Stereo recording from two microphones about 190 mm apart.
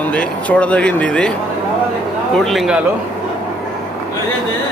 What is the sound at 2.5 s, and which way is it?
Speech, centre (ahead or behind).